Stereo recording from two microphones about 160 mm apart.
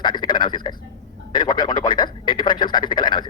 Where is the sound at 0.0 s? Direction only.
30° left (ahead or behind).